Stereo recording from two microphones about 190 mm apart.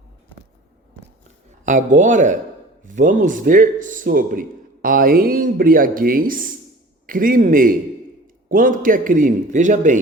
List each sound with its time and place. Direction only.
1.6 s a man's voice: 40° right (ahead or behind)